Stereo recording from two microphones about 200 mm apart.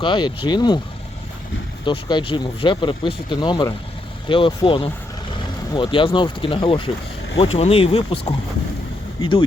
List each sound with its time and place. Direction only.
0.0 s speech: 25° left (ahead or behind)
1.8 s speech: 25° left (ahead or behind)